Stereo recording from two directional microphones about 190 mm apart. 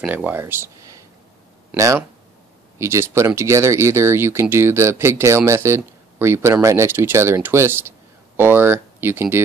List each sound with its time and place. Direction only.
0.0 s speech: 10° right (ahead or behind)